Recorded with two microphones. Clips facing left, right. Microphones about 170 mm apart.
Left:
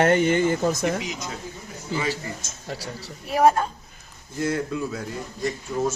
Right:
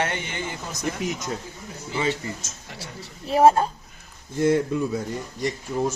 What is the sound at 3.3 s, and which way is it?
Speech, 30° right (ahead or behind).